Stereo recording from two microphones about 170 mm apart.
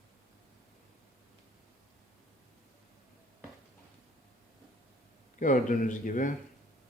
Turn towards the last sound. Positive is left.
turn(degrees=50)  # may be behind; listen again after turning